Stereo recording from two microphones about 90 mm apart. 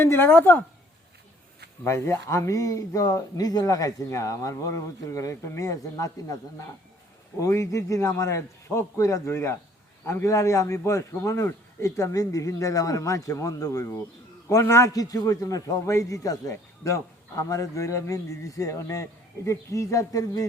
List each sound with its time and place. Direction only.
0.0 s a woman's voice: 25° left (ahead or behind)
1.8 s speech: 30° left (ahead or behind)